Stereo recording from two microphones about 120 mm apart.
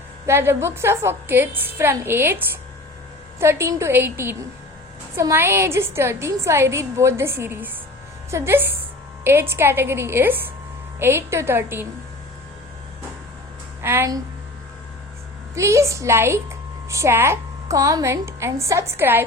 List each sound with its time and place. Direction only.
0.3 s a woman's voice: 20° right (ahead or behind)
3.4 s a woman's voice: 20° right (ahead or behind)
13.8 s a woman's voice: 20° right (ahead or behind)
15.5 s a woman's voice: 25° right (ahead or behind)